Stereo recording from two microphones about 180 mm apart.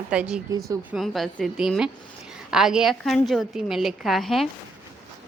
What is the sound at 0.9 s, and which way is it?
A woman's voice, centre (ahead or behind).